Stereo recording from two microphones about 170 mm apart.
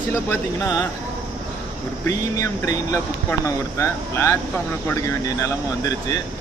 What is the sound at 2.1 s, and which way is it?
Speech, 20° left (ahead or behind).